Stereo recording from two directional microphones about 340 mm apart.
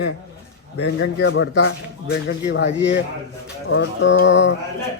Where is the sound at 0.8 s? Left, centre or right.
Left.